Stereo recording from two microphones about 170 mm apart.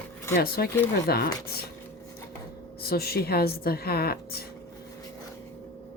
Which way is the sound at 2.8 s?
65° left (ahead or behind).